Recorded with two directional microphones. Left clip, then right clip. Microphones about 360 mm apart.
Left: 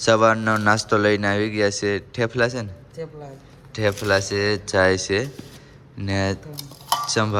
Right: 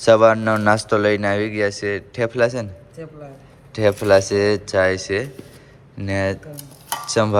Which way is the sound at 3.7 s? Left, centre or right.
Centre.